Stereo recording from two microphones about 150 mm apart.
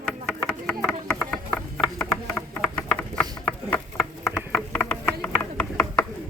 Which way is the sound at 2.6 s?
5° left (ahead or behind).